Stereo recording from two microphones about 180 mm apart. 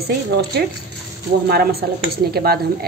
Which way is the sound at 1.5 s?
60° right (ahead or behind).